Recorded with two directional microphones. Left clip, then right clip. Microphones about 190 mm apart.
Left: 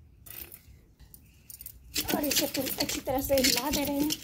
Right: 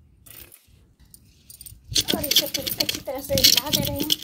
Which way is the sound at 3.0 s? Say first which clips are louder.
Right 6 dB; 35° left (ahead or behind).